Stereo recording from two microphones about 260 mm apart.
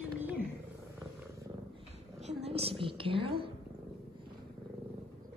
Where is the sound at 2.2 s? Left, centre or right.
Right.